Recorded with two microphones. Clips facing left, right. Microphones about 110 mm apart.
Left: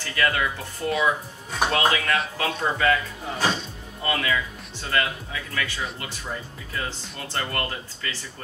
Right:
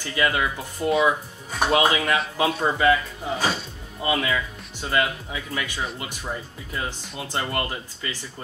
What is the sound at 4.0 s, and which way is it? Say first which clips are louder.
Speech: right 2 dB; 15° right (ahead or behind).